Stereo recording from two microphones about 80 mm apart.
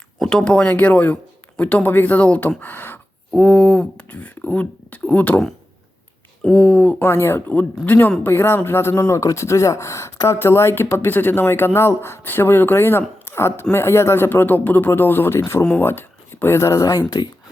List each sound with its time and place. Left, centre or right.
0.2 s speech: centre; by 3.0 s left
3.3 s speech: centre
6.4 s speech: centre
7.1 s speech: left